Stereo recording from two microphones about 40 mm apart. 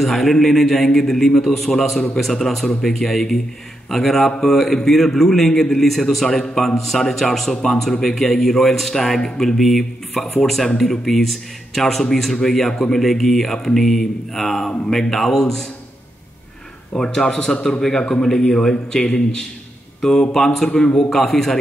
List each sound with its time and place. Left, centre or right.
0.0 s a man's voice: centre
16.9 s a man's voice: centre
21.1 s a man's voice: centre